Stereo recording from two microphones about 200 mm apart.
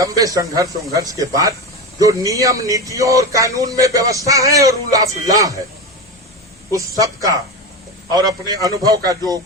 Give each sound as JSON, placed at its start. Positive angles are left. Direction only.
{"t": 0.0, "sound": "speech", "side_deg": -15}
{"t": 6.7, "sound": "speech", "side_deg": -15}
{"t": 9.0, "sound": "a sound", "side_deg": -20}